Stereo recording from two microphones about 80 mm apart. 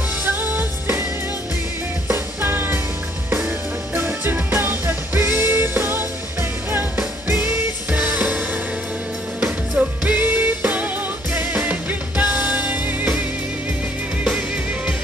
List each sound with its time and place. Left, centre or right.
0.2 s music: right
2.0 s music: right
7.2 s music: right
9.4 s music: centre